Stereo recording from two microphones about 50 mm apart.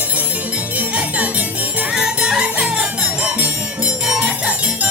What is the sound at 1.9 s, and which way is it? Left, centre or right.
Music, centre.